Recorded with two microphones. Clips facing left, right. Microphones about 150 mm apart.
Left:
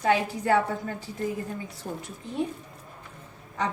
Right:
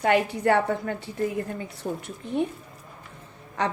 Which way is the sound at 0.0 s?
65° right (ahead or behind).